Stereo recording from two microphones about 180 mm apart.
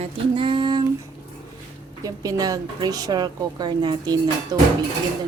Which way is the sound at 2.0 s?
20° right (ahead or behind).